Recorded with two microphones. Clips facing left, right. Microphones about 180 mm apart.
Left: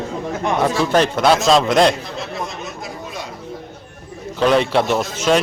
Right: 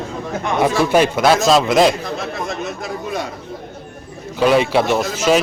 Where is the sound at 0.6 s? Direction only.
10° right (ahead or behind).